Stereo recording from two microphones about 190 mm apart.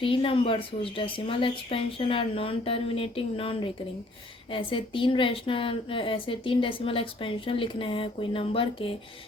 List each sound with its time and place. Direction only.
0.0 s speech: 25° left (ahead or behind)